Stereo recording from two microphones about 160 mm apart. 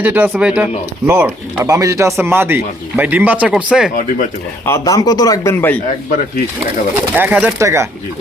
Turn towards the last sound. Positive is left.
turn(degrees=-15)  # may be behind; listen again after turning